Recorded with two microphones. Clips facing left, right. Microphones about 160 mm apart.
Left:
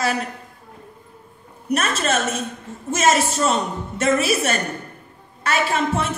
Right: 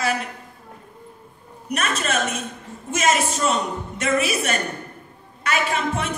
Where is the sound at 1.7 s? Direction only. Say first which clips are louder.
Left 3 dB; 35° left (ahead or behind).